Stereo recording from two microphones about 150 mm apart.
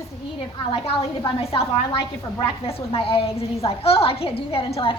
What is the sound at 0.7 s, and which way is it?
A woman's voice, 40° left (ahead or behind).